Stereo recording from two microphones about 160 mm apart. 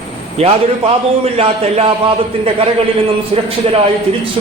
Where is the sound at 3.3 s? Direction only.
40° right (ahead or behind).